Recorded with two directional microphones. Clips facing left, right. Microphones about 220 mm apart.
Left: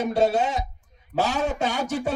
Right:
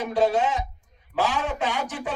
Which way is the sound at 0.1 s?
40° left (ahead or behind).